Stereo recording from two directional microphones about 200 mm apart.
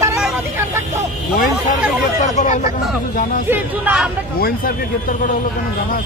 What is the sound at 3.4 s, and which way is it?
Speech, 10° right (ahead or behind).